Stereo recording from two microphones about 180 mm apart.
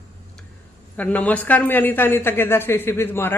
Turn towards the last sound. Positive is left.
turn(degrees=10)  # may be behind; listen again after turning